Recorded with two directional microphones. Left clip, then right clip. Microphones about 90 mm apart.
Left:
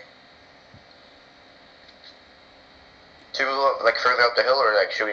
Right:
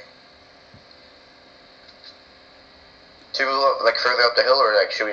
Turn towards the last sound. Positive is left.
turn(degrees=-20)  # may be behind; listen again after turning